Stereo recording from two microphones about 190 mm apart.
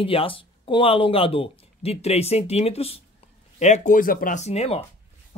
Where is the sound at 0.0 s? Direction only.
30° left (ahead or behind).